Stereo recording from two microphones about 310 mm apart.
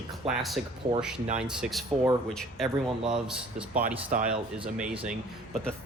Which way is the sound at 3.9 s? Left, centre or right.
Right.